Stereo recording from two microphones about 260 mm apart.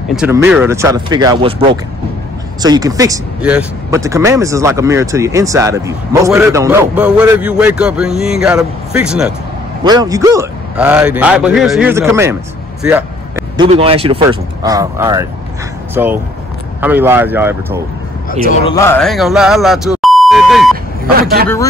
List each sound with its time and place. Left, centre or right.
0.1 s speech: centre
2.6 s speech: centre
9.8 s speech: centre
13.6 s speech: right
18.4 s a man's voice: left
18.8 s speech: centre
21.2 s speech: right